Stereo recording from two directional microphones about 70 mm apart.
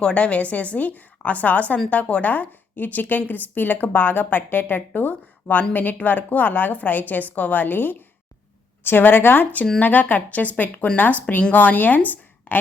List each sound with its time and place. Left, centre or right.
0.0 s a woman's voice: centre